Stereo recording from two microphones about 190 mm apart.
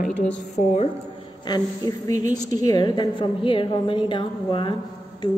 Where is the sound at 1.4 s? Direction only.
20° left (ahead or behind).